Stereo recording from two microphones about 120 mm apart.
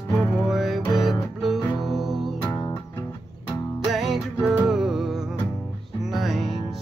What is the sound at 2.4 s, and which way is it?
Music, 20° left (ahead or behind).